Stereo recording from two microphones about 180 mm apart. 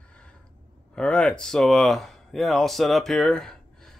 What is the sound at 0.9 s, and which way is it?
Speech, 5° left (ahead or behind).